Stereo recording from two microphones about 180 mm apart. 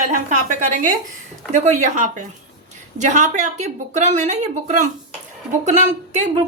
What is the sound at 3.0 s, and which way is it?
Speech, 40° right (ahead or behind).